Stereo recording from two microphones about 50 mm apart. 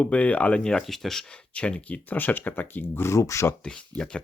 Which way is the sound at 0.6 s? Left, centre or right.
Centre.